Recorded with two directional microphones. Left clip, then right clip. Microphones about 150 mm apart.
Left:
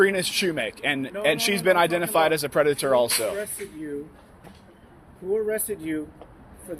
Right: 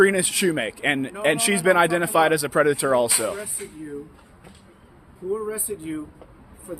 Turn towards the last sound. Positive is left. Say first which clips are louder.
# even
turn(degrees=-30)  # may be behind; listen again after turning